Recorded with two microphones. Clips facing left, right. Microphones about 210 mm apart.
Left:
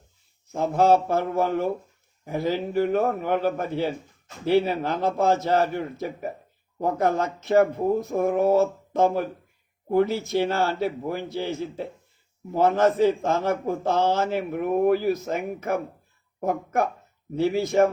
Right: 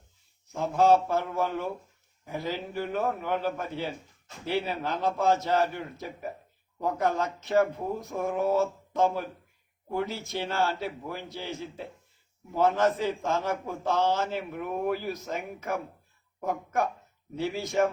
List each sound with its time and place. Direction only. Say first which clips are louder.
0.6 s a man's voice: left 3 dB; 50° left (ahead or behind)